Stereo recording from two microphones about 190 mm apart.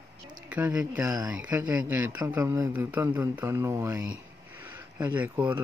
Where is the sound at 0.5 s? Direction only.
5° right (ahead or behind).